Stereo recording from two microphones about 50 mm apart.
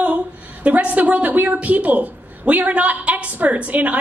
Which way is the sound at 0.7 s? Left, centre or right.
Right.